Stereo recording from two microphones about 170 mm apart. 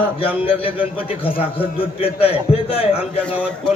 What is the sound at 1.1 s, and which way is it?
A man's voice, 35° left (ahead or behind).